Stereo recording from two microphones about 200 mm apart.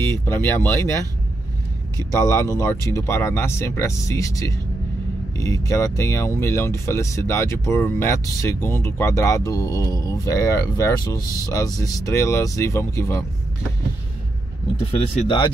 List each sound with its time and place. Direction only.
0.2 s speech: 10° left (ahead or behind)
2.0 s speech: 15° left (ahead or behind)
14.8 s speech: 25° left (ahead or behind)